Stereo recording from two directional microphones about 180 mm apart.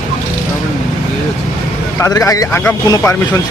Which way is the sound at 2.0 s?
20° left (ahead or behind).